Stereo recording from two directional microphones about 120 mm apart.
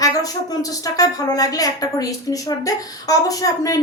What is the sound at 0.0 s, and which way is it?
A woman's voice, 30° left (ahead or behind).